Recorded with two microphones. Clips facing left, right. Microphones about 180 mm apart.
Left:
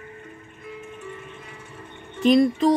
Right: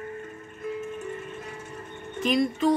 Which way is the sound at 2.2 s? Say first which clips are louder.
Left 6 dB; 35° left (ahead or behind).